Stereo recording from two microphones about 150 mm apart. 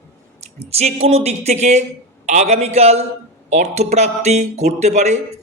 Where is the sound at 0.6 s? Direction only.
45° right (ahead or behind).